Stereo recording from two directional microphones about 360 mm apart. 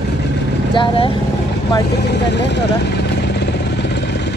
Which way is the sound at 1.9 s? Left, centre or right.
Left.